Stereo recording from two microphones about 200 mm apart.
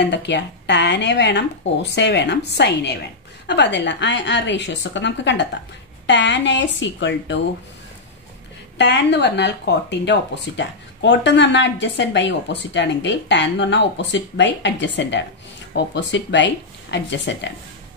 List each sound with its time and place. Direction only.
0.1 s speech: 60° left (ahead or behind)
8.7 s speech: 60° left (ahead or behind)